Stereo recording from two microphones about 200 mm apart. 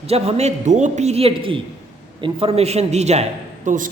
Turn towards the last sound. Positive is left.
turn(degrees=-40)  # may be behind; listen again after turning